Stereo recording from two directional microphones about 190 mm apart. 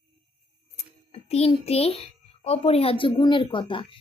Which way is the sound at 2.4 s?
30° left (ahead or behind).